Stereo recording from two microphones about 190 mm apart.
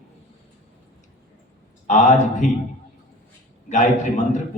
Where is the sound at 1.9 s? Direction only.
40° left (ahead or behind).